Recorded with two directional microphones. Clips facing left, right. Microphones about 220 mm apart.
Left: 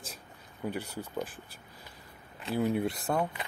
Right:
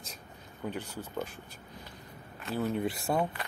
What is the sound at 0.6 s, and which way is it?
Speech, 10° left (ahead or behind).